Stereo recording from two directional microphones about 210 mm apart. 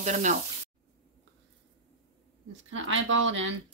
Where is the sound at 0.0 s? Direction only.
35° right (ahead or behind).